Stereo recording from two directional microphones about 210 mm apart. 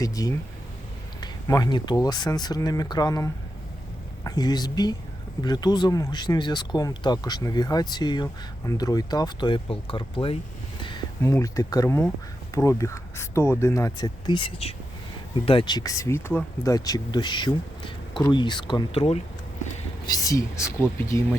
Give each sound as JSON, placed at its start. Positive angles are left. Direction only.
{"t": 0.0, "sound": "speech", "side_deg": 15}
{"t": 20.1, "sound": "speech", "side_deg": 15}